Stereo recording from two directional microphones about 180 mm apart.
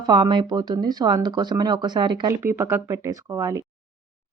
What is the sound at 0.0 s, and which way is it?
Speech, 25° right (ahead or behind).